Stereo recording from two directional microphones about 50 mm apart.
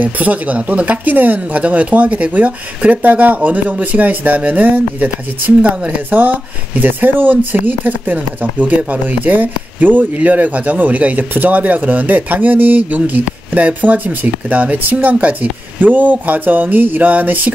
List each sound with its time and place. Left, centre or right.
0.0 s speech: right